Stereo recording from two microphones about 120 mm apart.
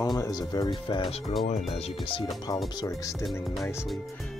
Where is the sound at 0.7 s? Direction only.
40° left (ahead or behind).